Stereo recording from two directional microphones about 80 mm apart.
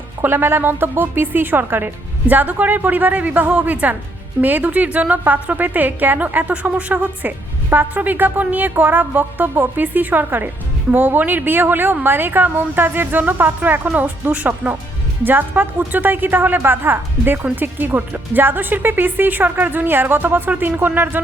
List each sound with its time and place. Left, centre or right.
0.2 s a woman's voice: right